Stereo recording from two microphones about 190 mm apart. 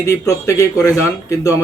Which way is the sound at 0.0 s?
15° left (ahead or behind).